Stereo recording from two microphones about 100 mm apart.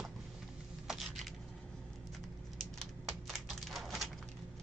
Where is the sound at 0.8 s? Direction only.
Centre (ahead or behind).